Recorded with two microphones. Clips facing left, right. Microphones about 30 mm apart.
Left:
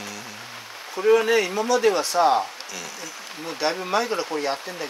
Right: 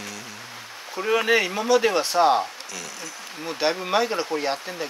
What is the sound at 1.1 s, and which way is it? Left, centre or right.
Speech, right.